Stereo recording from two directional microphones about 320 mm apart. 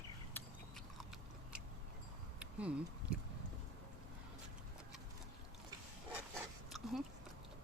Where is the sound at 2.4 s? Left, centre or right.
Centre.